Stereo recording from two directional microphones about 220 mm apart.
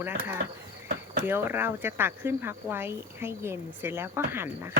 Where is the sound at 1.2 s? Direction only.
10° right (ahead or behind).